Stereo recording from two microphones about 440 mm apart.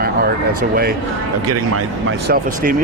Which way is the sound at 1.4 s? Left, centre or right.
Right.